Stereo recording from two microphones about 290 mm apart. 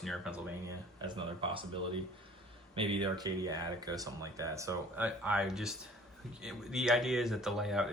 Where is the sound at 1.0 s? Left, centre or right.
Centre.